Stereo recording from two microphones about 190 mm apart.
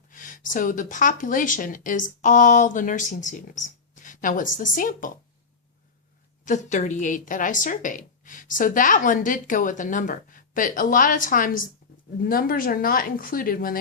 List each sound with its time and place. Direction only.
0.1 s a woman's voice: 45° left (ahead or behind)
6.4 s a woman's voice: 40° left (ahead or behind)